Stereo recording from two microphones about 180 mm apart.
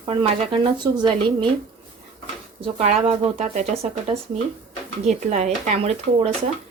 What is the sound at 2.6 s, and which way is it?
Speech, 35° right (ahead or behind).